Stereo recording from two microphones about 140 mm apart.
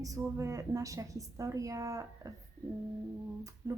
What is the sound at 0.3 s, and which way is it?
A woman's voice, 25° right (ahead or behind).